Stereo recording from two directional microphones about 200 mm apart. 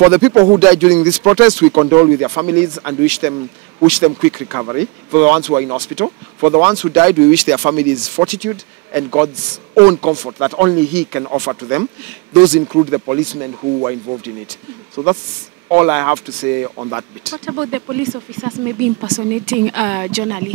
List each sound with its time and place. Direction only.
0.0 s speech: 15° right (ahead or behind)
15.0 s speech: 20° right (ahead or behind)
16.7 s speech: 25° right (ahead or behind)
18.9 s speech: 20° right (ahead or behind)